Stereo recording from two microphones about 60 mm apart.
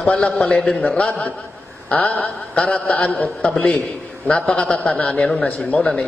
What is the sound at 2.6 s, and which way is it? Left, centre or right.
A man's voice, centre.